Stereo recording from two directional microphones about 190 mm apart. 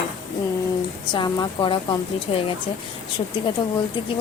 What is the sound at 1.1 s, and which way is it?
A woman's voice, 25° left (ahead or behind).